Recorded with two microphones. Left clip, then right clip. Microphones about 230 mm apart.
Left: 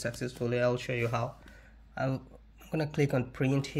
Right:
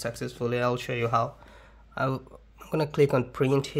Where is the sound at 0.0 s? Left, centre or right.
Right.